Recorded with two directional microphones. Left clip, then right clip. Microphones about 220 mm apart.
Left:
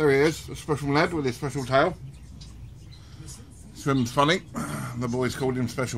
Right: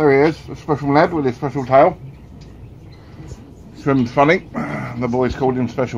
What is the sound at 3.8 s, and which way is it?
Speech, 25° left (ahead or behind).